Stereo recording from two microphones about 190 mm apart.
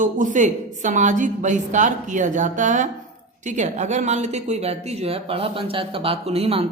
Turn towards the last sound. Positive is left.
turn(degrees=-30)  # may be behind; listen again after turning